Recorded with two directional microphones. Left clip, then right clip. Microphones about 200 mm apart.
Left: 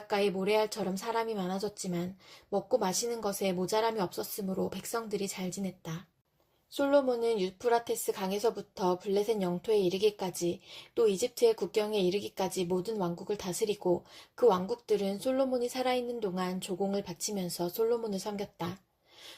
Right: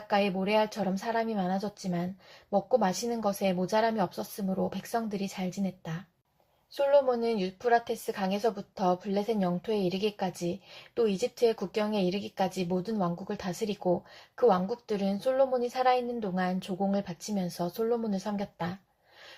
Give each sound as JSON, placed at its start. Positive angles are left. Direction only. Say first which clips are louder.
{"t": 0.1, "sound": "a woman's voice", "louder": "right 2 dB", "side_deg": 35}